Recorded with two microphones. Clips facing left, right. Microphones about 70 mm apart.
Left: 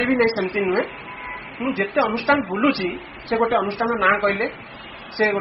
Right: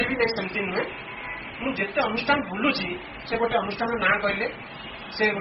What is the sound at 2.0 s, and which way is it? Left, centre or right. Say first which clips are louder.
Speech: left 5 dB; left.